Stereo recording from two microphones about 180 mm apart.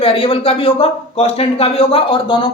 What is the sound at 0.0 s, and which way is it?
Speech, 30° left (ahead or behind).